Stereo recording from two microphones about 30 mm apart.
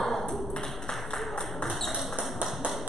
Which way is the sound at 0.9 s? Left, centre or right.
Left.